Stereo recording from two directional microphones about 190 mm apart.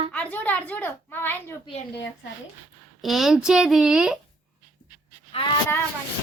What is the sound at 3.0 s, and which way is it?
Speech, centre (ahead or behind).